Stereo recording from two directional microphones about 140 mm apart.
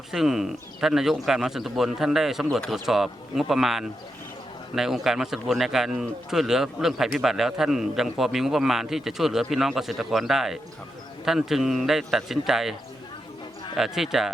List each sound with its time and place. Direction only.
0.1 s a man's voice: centre (ahead or behind)
13.7 s a man's voice: centre (ahead or behind)